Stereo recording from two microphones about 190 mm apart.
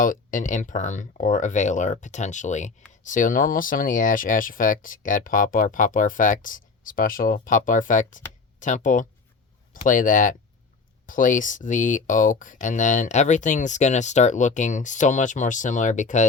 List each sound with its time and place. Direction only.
0.0 s speech: 45° left (ahead or behind)